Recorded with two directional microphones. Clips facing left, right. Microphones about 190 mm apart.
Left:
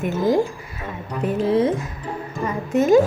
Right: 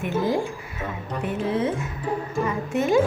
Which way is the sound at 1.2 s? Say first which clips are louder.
Left 6 dB; 35° left (ahead or behind).